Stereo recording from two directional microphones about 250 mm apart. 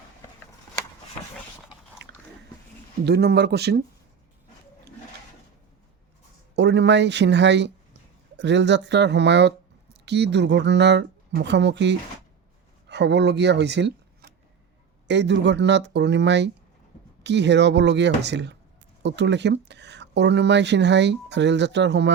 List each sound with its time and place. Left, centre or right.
2.0 s biting: right
3.1 s speech: right
6.6 s speech: right